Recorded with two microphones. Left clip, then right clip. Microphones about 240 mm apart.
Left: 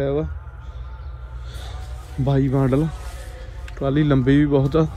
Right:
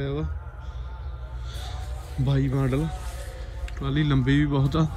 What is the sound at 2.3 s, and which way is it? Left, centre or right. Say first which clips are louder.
A man's voice: left 7 dB; centre.